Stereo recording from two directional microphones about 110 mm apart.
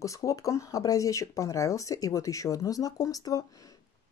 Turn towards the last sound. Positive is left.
turn(degrees=35)  # may be behind; listen again after turning